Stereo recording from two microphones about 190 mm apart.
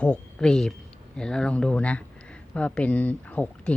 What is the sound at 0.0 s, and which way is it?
Speech, 5° left (ahead or behind).